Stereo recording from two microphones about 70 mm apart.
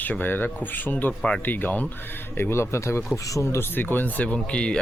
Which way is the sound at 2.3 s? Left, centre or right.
Left.